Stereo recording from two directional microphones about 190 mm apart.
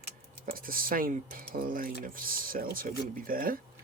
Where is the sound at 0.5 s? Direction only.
50° right (ahead or behind).